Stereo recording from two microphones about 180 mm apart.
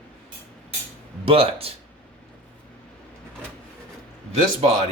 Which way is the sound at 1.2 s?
30° right (ahead or behind).